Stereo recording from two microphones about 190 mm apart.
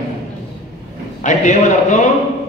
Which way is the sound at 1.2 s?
40° left (ahead or behind).